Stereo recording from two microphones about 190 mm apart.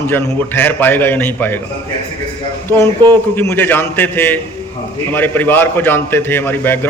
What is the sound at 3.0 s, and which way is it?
Speech, 25° right (ahead or behind).